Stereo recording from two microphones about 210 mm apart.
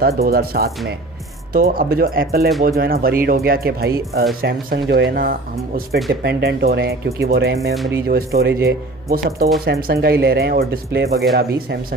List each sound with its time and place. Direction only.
0.0 s speech: 45° right (ahead or behind)